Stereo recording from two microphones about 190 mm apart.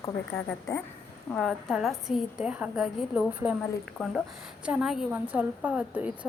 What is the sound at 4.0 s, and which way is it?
A woman's voice, 5° left (ahead or behind).